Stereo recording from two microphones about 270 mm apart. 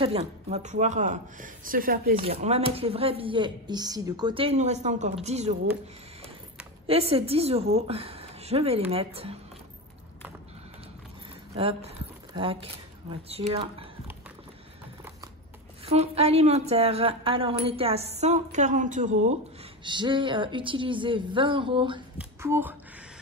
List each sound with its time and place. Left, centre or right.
0.0 s speech: right
2.1 s speech: right
6.9 s speech: right
11.5 s speech: right
15.8 s speech: right
19.8 s speech: centre